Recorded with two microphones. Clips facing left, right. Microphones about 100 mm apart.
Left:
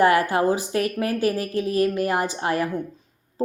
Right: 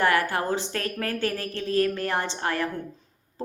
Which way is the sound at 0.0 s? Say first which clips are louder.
Left 5 dB; 15° left (ahead or behind).